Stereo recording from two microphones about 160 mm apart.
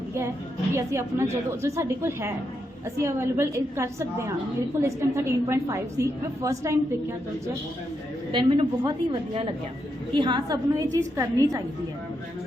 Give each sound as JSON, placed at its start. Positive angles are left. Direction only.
{"t": 0.7, "sound": "a woman's voice", "side_deg": -15}
{"t": 8.3, "sound": "a woman's voice", "side_deg": -30}